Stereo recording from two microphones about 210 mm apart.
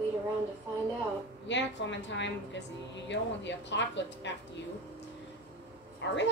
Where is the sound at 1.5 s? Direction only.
60° left (ahead or behind).